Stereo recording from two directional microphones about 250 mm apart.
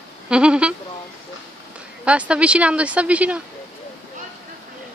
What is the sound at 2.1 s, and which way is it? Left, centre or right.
Speech, centre.